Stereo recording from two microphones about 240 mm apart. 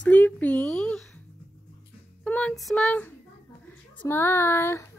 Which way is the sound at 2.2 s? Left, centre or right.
Centre.